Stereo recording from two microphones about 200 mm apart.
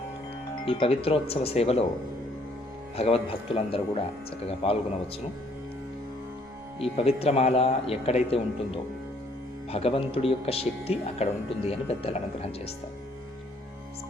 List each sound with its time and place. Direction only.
0.6 s speech: 30° left (ahead or behind)
2.9 s speech: 30° left (ahead or behind)
6.9 s speech: 30° left (ahead or behind)